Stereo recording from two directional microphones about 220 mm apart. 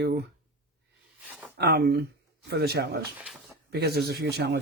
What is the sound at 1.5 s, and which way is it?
Speech, 50° right (ahead or behind).